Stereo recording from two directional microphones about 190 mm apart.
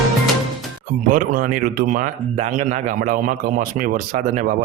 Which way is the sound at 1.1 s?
45° right (ahead or behind).